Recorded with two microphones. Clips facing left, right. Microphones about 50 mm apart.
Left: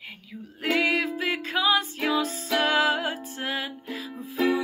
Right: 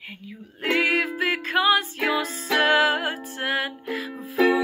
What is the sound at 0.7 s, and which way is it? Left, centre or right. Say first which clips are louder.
Music: right 2 dB; right.